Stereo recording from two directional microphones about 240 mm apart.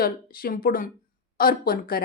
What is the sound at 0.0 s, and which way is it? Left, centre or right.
Speech, left.